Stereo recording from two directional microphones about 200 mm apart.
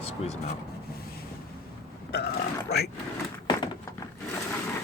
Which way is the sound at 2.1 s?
55° left (ahead or behind).